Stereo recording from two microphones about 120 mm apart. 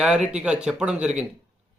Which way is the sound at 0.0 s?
10° right (ahead or behind).